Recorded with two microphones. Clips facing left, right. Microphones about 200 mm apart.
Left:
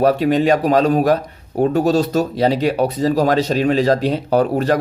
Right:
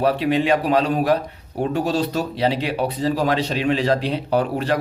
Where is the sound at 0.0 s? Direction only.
45° left (ahead or behind).